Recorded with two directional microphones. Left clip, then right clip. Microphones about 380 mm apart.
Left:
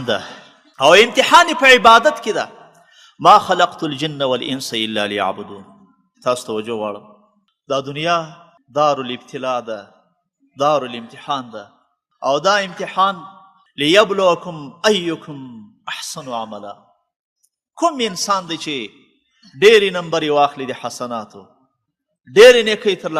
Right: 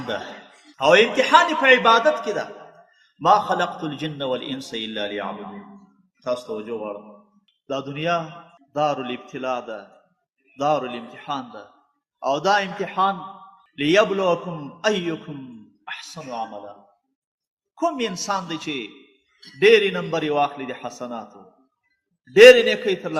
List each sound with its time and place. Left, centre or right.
0.8 s a man's voice: left
6.2 s a man's voice: left
17.7 s a man's voice: left
22.3 s a man's voice: left